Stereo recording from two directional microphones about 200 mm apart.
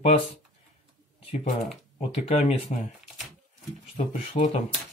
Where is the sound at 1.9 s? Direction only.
30° left (ahead or behind).